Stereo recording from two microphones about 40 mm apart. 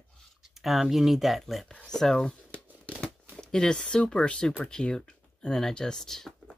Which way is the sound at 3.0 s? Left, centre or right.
Left.